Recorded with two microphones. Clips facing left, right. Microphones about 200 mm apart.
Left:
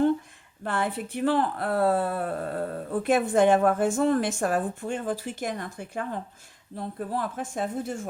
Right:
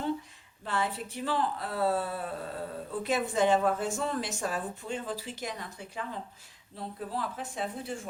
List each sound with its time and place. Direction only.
0.6 s speech: 55° left (ahead or behind)